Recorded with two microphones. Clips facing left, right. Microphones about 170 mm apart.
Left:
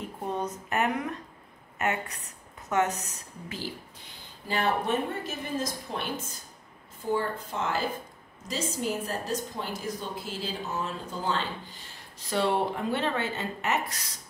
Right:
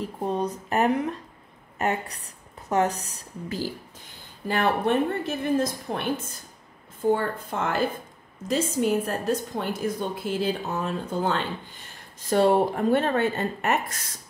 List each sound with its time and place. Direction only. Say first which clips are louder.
0.0 s speech: right 5 dB; 30° right (ahead or behind)
4.5 s a woman's voice: right 4 dB; 55° right (ahead or behind)
7.1 s a woman's voice: right 5 dB; 55° right (ahead or behind)
12.2 s speech: right 7 dB; 45° right (ahead or behind)